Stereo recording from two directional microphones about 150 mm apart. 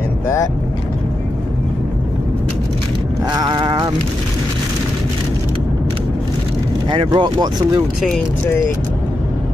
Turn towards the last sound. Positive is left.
turn(degrees=-30)  # may be behind; listen again after turning